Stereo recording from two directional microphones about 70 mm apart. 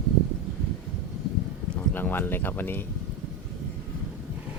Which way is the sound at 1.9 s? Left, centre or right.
Left.